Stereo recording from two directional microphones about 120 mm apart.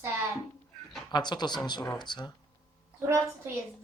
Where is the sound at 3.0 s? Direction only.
20° right (ahead or behind).